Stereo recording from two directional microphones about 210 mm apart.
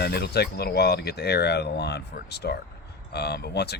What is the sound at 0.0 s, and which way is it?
Speech, 50° left (ahead or behind).